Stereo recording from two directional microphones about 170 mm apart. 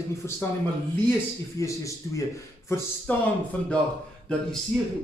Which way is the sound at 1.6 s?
20° left (ahead or behind).